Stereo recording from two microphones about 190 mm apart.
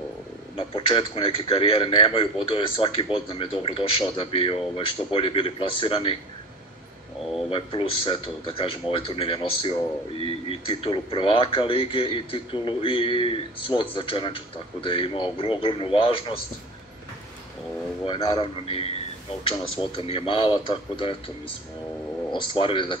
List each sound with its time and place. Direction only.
0.6 s a man's voice: 30° left (ahead or behind)
7.4 s a man's voice: 30° left (ahead or behind)
18.0 s a man's voice: 20° left (ahead or behind)
22.3 s a man's voice: 25° left (ahead or behind)